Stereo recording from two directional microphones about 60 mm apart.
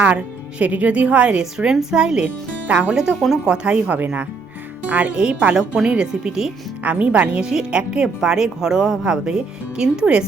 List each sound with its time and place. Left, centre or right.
0.2 s a woman's voice: right
1.5 s speech: centre
2.2 s speech: right
2.9 s a woman's voice: centre
6.8 s a woman's voice: right